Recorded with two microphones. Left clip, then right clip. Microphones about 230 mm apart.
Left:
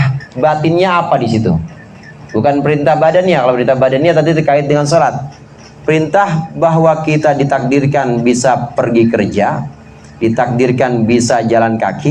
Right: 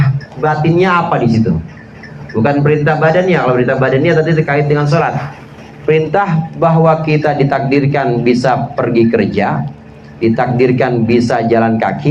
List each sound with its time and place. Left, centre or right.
0.4 s a man's voice: left
2.4 s a man's voice: left